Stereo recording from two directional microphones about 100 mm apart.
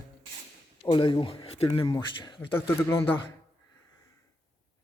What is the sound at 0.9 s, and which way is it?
Speech, 55° left (ahead or behind).